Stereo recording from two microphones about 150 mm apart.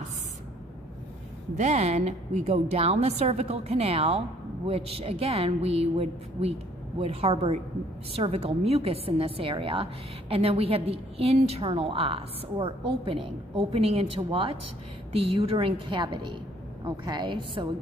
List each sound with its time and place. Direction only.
1.5 s a woman's voice: 50° right (ahead or behind); by 17.6 s 30° right (ahead or behind)